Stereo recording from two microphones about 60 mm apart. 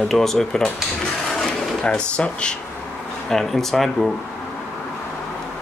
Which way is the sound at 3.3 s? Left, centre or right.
Centre.